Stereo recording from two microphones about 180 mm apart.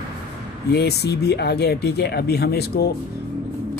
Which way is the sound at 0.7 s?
65° left (ahead or behind).